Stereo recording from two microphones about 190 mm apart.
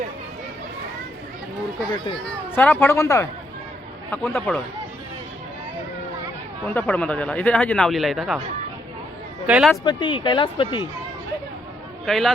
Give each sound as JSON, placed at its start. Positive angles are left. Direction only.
{"t": 2.6, "sound": "speech", "side_deg": 10}
{"t": 6.7, "sound": "speech", "side_deg": 5}
{"t": 9.5, "sound": "speech", "side_deg": -5}
{"t": 9.8, "sound": "speech", "side_deg": 25}
{"t": 12.0, "sound": "speech", "side_deg": 0}